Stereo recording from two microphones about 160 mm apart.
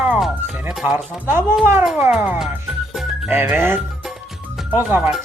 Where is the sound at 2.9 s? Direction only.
5° right (ahead or behind).